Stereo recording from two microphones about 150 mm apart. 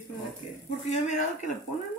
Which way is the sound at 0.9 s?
50° left (ahead or behind).